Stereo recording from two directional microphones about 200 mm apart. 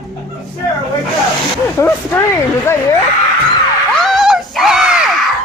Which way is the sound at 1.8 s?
15° left (ahead or behind).